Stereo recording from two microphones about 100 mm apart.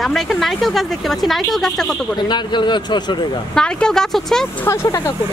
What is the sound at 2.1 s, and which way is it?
Speech, 50° left (ahead or behind).